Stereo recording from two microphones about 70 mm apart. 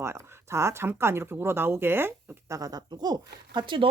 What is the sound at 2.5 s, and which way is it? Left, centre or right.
Speech, right.